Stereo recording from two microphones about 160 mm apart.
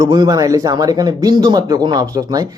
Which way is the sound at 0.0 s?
25° right (ahead or behind).